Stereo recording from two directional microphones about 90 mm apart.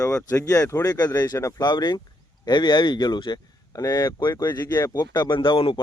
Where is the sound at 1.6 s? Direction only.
50° left (ahead or behind).